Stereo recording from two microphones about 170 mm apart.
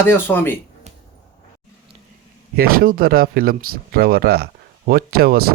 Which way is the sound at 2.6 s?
60° right (ahead or behind).